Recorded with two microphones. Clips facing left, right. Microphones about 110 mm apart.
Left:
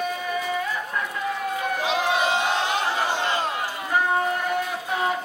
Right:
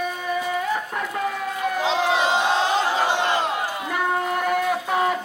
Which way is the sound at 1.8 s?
25° right (ahead or behind).